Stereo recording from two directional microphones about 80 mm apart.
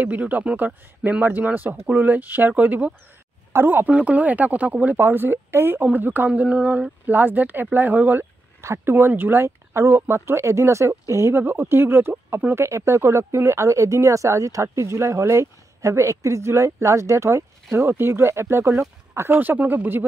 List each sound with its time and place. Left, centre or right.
0.0 s speech: right